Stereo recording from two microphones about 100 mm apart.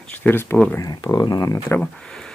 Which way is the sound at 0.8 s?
40° left (ahead or behind).